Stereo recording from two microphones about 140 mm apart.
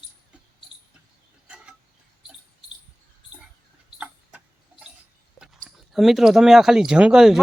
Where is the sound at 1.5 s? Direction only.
5° right (ahead or behind).